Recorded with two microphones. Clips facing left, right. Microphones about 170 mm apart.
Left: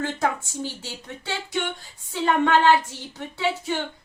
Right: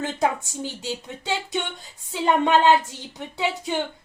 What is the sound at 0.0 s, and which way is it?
A woman's voice, 20° right (ahead or behind).